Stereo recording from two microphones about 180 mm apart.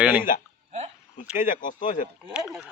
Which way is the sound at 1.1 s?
45° left (ahead or behind).